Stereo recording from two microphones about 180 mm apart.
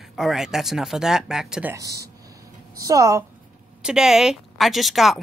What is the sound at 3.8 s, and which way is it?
Speech, 5° right (ahead or behind).